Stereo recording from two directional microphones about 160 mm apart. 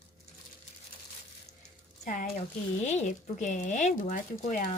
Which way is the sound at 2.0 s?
55° left (ahead or behind).